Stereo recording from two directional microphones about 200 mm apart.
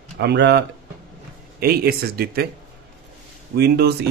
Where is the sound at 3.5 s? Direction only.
55° right (ahead or behind).